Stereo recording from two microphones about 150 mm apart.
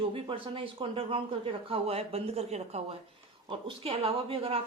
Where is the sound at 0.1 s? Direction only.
35° right (ahead or behind).